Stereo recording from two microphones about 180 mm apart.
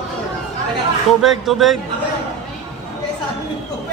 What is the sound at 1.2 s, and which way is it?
Speech, centre (ahead or behind).